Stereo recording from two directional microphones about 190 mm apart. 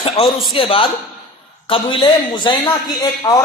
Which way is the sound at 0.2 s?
30° left (ahead or behind).